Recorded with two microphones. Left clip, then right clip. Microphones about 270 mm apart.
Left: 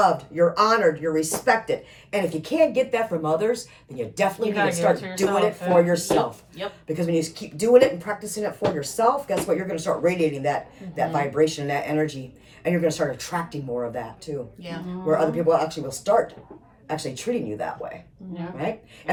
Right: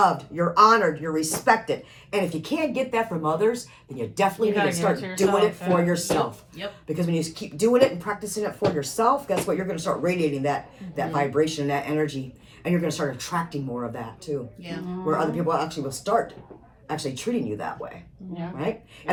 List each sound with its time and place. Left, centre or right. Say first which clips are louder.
0.0 s speech: left 2 dB; centre
15.2 s speech: left 5 dB; centre